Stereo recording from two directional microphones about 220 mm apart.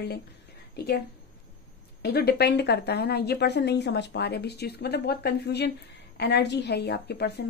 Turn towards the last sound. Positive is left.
turn(degrees=50)  # may be behind; listen again after turning